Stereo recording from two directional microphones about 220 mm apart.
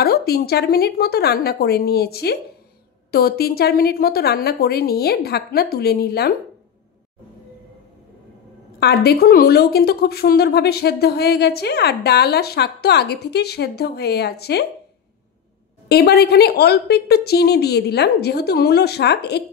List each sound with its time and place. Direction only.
0.0 s a woman's voice: 45° left (ahead or behind)
8.7 s a woman's voice: 45° left (ahead or behind)
15.9 s a woman's voice: 45° left (ahead or behind)